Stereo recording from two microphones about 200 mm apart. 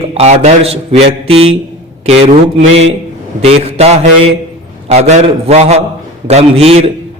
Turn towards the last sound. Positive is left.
turn(degrees=-30)  # may be behind; listen again after turning